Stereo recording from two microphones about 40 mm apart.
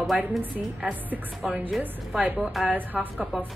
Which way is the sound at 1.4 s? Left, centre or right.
Centre.